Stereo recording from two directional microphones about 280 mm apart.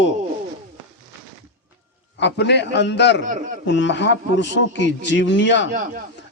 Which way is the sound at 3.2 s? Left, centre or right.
Right.